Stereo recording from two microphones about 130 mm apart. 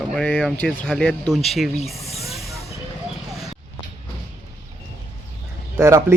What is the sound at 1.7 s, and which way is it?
Snake, 55° left (ahead or behind).